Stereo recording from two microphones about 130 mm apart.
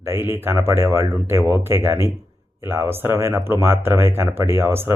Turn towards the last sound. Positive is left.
turn(degrees=-15)  # may be behind; listen again after turning